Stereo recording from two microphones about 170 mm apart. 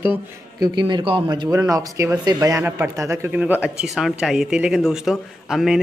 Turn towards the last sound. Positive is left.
turn(degrees=0)  # may be behind; listen again after turning